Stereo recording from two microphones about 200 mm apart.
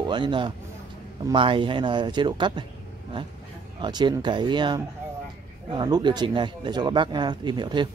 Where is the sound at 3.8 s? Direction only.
20° right (ahead or behind).